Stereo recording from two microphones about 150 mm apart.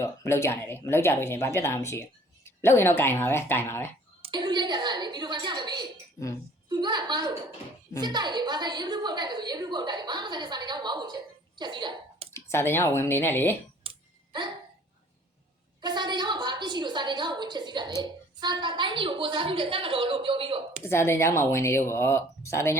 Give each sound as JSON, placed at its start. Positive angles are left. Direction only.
{"t": 0.0, "sound": "speech", "side_deg": 20}
{"t": 4.2, "sound": "a woman's voice", "side_deg": -30}
{"t": 12.3, "sound": "speech", "side_deg": 15}
{"t": 13.8, "sound": "a sound", "side_deg": -40}
{"t": 15.8, "sound": "a woman's voice", "side_deg": -30}
{"t": 20.8, "sound": "speech", "side_deg": 15}